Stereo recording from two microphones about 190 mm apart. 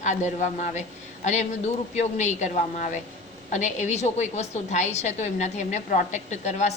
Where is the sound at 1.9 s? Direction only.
35° left (ahead or behind).